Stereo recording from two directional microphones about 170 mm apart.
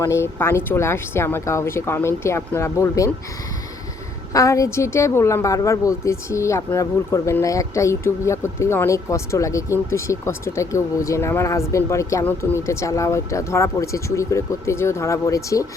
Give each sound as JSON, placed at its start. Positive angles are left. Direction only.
{"t": 0.0, "sound": "a woman's voice", "side_deg": 15}
{"t": 4.3, "sound": "a woman's voice", "side_deg": 20}